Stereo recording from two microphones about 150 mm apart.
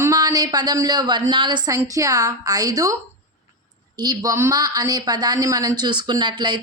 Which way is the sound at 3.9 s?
30° right (ahead or behind).